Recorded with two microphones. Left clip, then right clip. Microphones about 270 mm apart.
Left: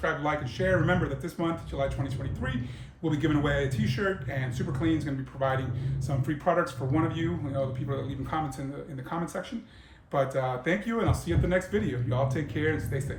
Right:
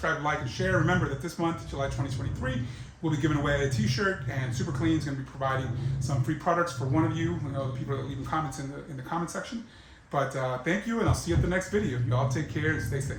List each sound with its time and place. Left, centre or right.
0.0 s speech: centre
3.0 s speech: centre